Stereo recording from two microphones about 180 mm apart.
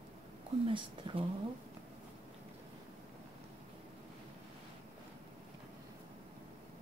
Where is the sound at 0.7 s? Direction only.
30° right (ahead or behind).